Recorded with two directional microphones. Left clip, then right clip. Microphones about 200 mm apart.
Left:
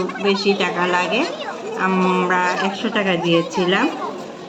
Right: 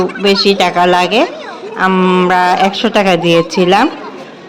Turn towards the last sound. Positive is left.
turn(degrees=-55)  # may be behind; listen again after turning